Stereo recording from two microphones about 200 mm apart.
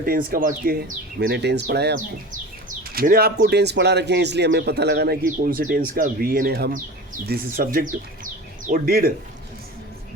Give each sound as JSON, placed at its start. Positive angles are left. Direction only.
{"t": 0.0, "sound": "speech", "side_deg": -45}